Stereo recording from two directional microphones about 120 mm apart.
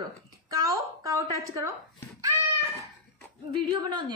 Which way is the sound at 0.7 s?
30° right (ahead or behind).